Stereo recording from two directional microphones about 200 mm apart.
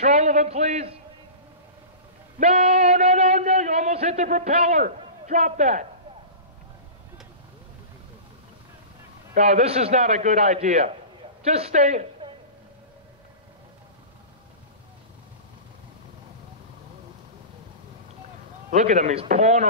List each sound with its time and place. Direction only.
0.0 s a man's voice: 35° right (ahead or behind)
2.4 s a sound: 35° right (ahead or behind)
9.3 s a man's voice: 35° right (ahead or behind)
18.7 s a man's voice: 35° right (ahead or behind)